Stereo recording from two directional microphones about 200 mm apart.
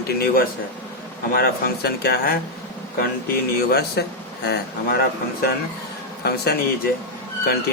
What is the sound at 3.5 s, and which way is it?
Speech, 55° left (ahead or behind).